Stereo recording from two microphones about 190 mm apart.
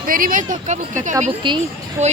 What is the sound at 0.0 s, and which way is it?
Speech, 45° right (ahead or behind).